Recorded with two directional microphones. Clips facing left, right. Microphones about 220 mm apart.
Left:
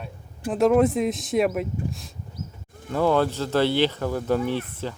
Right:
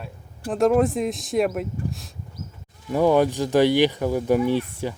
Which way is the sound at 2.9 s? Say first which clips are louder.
Right 3 dB; 15° right (ahead or behind).